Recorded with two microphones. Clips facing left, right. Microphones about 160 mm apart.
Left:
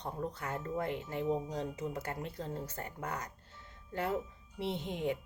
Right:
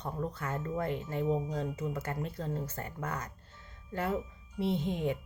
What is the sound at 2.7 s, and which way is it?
Speech, 15° left (ahead or behind).